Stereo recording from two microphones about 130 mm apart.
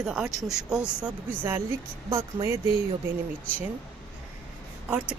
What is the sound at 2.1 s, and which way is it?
Speech, 20° right (ahead or behind).